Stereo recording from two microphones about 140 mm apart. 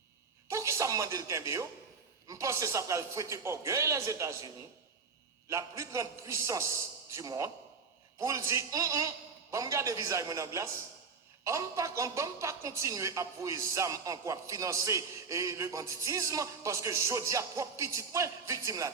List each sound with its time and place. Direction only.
0.4 s a man's voice: 20° right (ahead or behind)